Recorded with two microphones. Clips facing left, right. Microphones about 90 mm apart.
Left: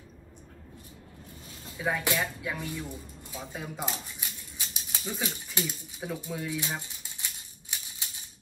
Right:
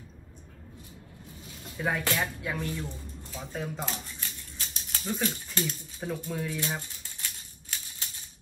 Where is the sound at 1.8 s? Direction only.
Centre (ahead or behind).